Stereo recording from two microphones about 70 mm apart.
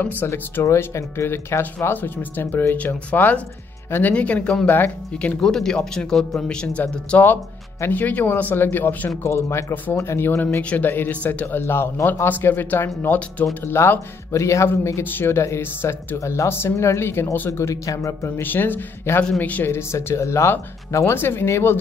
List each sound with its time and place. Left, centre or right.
0.2 s speech: left; by 4.6 s centre
4.6 s speech: left
5.4 s speech: centre
6.8 s speech: left
10.6 s speech: centre
16.2 s speech: left
18.4 s speech: left
19.7 s speech: left